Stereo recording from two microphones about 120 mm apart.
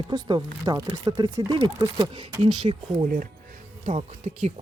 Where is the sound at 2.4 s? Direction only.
55° right (ahead or behind).